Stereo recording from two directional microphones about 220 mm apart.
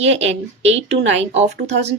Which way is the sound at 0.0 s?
30° right (ahead or behind).